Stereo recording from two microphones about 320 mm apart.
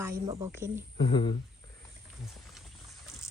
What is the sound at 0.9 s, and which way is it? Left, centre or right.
Speech, centre.